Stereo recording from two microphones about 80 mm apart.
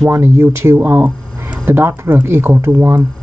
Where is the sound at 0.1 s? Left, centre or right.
Right.